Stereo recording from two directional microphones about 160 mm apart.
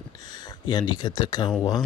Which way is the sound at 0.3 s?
25° left (ahead or behind).